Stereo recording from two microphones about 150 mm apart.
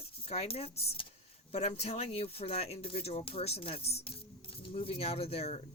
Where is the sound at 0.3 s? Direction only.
45° left (ahead or behind).